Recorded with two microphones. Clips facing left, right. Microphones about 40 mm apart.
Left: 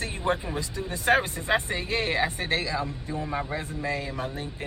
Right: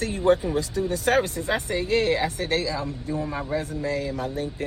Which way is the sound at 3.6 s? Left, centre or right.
Left.